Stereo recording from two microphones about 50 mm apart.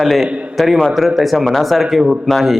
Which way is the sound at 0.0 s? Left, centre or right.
Centre.